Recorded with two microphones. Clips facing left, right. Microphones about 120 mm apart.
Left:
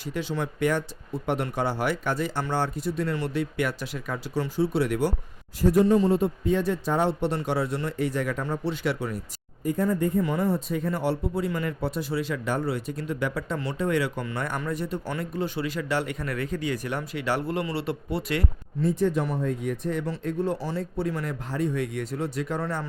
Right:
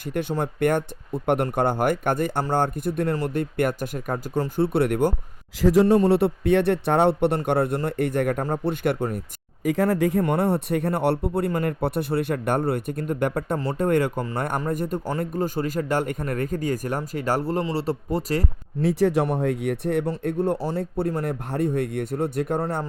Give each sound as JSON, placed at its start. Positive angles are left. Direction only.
{"t": 0.0, "sound": "speech", "side_deg": -55}
{"t": 5.5, "sound": "speech", "side_deg": -90}
{"t": 9.6, "sound": "speech", "side_deg": -90}
{"t": 18.8, "sound": "speech", "side_deg": -85}
{"t": 20.1, "sound": "speech", "side_deg": -55}